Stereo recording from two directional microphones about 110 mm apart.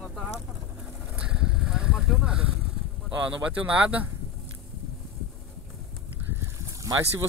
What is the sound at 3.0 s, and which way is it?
Speech, 10° right (ahead or behind).